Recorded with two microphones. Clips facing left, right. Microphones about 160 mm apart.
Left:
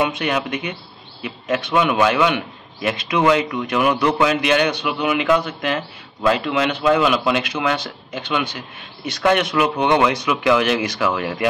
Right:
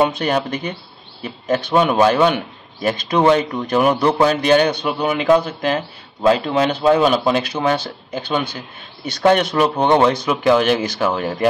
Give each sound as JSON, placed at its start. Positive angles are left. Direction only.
{"t": 0.0, "sound": "a man's voice", "side_deg": -30}